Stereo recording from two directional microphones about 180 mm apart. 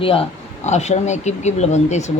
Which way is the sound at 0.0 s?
30° left (ahead or behind).